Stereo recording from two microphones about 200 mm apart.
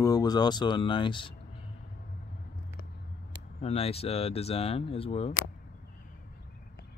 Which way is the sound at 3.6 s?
30° left (ahead or behind).